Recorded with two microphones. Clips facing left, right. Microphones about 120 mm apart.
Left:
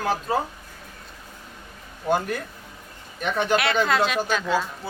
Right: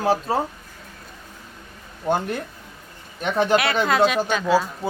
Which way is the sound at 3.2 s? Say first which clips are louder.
Right 3 dB; 30° right (ahead or behind).